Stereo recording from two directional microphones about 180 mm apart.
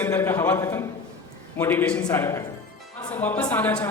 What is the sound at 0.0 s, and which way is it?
A woman's voice, 10° left (ahead or behind).